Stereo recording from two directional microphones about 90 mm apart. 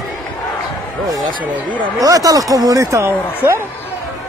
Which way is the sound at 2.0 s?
40° right (ahead or behind).